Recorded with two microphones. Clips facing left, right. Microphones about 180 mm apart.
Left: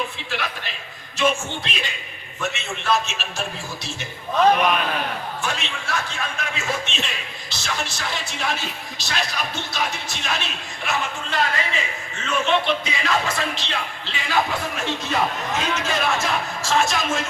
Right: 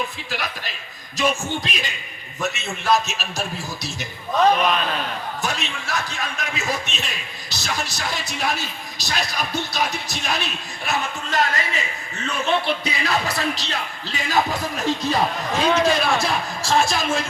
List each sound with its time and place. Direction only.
0.3 s speech: 40° right (ahead or behind)
5.4 s speech: 40° right (ahead or behind)